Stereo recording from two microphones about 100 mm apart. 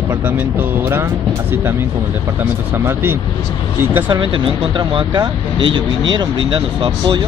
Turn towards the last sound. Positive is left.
turn(degrees=-55)  # may be behind; listen again after turning